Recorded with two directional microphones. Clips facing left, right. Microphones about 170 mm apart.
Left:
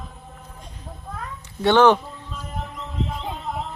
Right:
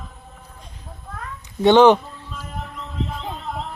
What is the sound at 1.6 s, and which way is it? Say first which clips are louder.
Speech: right 3 dB; 15° right (ahead or behind).